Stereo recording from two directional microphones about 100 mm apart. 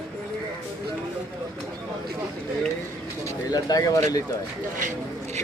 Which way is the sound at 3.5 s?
40° left (ahead or behind).